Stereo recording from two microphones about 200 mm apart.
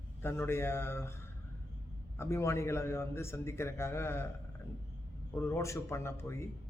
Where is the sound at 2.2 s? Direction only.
15° left (ahead or behind).